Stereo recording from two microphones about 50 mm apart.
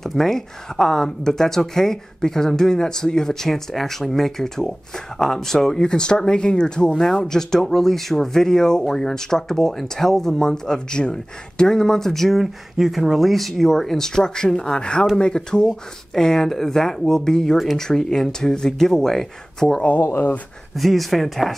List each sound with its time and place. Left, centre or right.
0.0 s speech: centre
20.0 s speech: left
20.7 s speech: centre